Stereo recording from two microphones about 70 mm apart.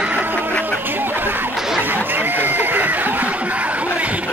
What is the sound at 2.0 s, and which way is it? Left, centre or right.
Snicker, right.